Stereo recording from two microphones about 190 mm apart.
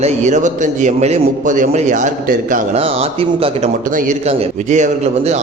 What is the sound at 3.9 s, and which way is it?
Speech, 45° right (ahead or behind).